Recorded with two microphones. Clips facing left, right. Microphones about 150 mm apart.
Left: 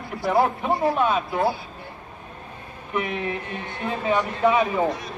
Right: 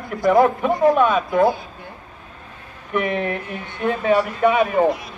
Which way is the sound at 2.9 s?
60° right (ahead or behind).